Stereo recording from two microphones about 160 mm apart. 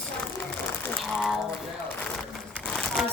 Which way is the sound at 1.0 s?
Centre (ahead or behind).